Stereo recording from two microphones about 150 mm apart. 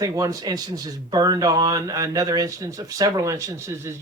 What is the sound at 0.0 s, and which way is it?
Speech, 25° right (ahead or behind).